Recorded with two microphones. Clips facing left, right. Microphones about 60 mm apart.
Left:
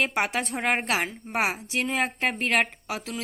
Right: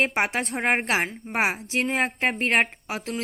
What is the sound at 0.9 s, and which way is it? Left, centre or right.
A woman's voice, right.